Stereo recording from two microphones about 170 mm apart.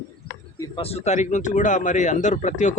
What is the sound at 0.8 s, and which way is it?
Speech, 35° left (ahead or behind).